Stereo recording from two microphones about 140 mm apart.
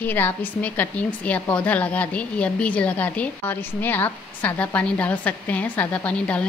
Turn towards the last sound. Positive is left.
turn(degrees=10)  # may be behind; listen again after turning